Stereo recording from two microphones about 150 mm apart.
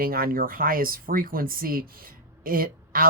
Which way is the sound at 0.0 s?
75° right (ahead or behind).